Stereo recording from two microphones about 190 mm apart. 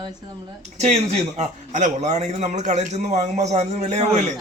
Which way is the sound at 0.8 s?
35° right (ahead or behind).